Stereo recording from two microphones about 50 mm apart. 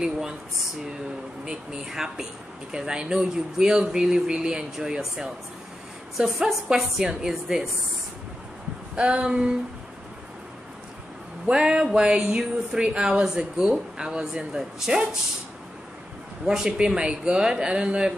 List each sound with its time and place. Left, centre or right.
1.4 s speech: centre
8.9 s a sound: centre
11.5 s speech: centre
16.4 s speech: centre